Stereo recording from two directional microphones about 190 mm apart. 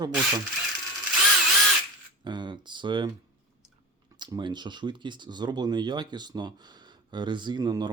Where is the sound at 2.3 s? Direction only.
25° right (ahead or behind).